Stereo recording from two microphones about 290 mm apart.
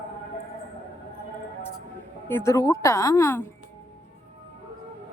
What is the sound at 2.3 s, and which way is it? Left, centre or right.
A woman's voice, centre.